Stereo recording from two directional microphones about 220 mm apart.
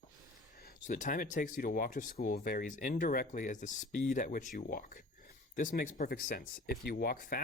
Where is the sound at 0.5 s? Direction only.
40° left (ahead or behind).